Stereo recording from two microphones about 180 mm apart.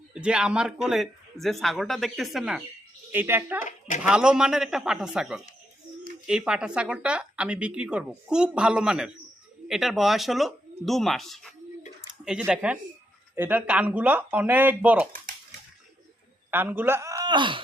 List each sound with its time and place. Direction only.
0.1 s speech: 5° right (ahead or behind)
3.6 s speech: 45° left (ahead or behind)
4.0 s speech: 5° right (ahead or behind)
16.5 s speech: 10° right (ahead or behind); by 17.6 s 25° right (ahead or behind)